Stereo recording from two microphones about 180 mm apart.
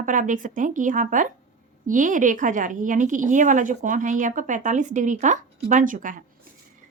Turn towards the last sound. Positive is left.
turn(degrees=-45)  # may be behind; listen again after turning